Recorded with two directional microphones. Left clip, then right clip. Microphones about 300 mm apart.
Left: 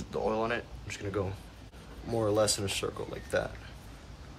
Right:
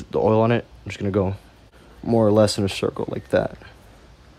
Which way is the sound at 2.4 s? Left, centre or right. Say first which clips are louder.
Right 10 dB; right.